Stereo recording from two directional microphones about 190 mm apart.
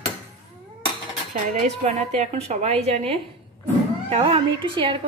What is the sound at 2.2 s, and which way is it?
A woman's voice, 35° right (ahead or behind).